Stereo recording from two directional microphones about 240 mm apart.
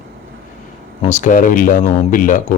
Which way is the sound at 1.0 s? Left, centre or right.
Left.